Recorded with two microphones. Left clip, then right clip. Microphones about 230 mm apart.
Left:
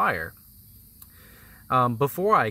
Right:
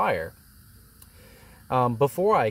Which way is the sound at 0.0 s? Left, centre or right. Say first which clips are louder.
Even; left.